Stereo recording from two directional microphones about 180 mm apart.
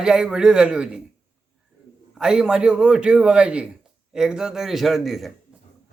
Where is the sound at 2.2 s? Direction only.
5° right (ahead or behind).